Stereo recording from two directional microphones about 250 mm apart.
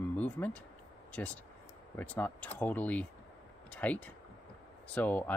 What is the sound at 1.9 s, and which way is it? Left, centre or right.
Speech, centre.